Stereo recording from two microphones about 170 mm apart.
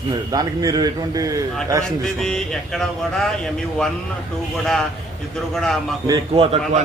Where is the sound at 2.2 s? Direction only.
5° left (ahead or behind).